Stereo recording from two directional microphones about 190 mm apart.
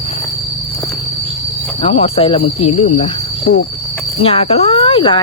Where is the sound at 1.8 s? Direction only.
30° left (ahead or behind).